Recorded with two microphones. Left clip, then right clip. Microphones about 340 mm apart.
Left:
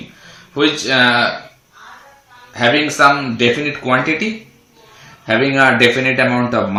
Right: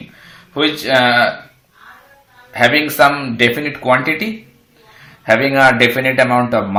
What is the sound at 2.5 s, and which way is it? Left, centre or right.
Speech, right.